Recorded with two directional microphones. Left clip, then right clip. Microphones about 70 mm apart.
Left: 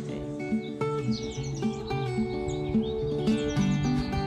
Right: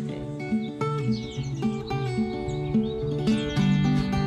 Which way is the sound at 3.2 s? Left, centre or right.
Left.